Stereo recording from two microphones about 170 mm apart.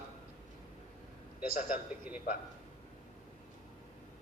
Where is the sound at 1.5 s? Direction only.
55° left (ahead or behind).